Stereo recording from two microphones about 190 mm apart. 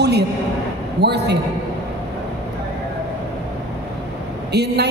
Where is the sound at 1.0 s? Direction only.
60° right (ahead or behind).